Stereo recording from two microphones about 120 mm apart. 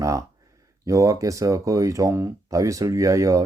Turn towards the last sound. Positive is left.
turn(degrees=-25)  # may be behind; listen again after turning